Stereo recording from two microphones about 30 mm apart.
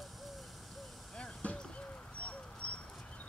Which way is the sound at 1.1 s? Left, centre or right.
Left.